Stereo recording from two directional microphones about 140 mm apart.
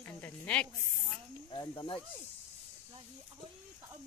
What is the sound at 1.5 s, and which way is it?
Speech, 35° left (ahead or behind).